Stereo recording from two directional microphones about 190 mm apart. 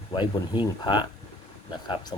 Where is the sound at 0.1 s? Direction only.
25° left (ahead or behind).